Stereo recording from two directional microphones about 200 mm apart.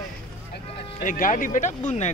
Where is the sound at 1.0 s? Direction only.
40° left (ahead or behind).